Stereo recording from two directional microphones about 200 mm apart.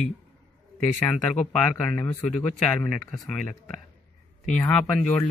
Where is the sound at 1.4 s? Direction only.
10° left (ahead or behind).